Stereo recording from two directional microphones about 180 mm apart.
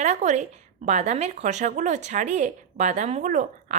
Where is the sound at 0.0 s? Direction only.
40° right (ahead or behind).